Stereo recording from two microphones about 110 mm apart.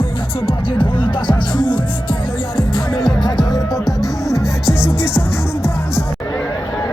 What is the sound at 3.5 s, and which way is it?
Music, centre (ahead or behind).